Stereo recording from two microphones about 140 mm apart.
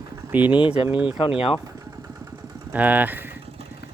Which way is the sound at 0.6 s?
40° left (ahead or behind).